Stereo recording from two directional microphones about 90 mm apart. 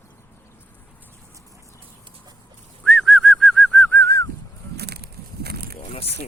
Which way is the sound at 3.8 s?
20° left (ahead or behind).